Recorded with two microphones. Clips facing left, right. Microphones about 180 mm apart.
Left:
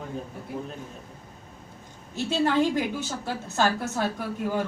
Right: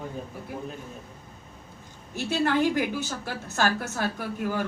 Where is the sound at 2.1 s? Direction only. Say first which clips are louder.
Left 1 dB; 25° left (ahead or behind).